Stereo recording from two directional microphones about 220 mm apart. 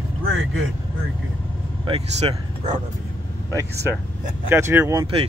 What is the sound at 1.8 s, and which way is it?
Speech, 25° right (ahead or behind).